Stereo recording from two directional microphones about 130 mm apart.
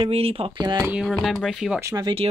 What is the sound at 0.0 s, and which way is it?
Speech, 50° right (ahead or behind).